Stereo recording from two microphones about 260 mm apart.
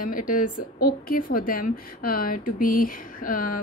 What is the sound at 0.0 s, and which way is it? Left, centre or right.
A woman's voice, left.